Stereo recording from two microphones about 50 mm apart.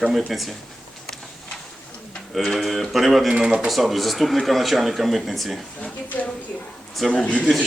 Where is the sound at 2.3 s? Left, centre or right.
Centre.